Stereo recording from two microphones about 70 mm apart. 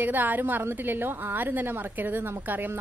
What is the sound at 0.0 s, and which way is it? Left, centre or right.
A woman's voice, right.